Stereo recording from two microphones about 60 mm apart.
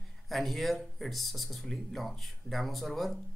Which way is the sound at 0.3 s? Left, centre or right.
Centre.